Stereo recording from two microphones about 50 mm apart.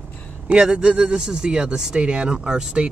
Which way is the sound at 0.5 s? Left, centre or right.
Centre.